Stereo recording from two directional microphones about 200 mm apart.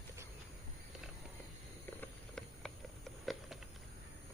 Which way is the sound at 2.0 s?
5° left (ahead or behind).